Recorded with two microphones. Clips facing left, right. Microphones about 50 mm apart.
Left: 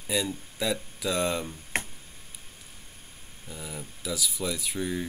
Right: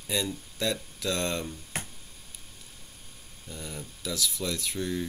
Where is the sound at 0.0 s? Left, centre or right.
Centre.